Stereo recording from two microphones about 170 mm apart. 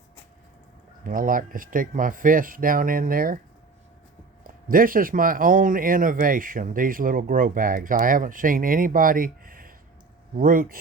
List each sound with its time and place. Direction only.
1.0 s speech: 55° right (ahead or behind)
4.4 s speech: 55° right (ahead or behind)